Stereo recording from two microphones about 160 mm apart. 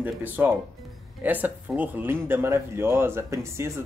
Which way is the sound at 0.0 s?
10° right (ahead or behind).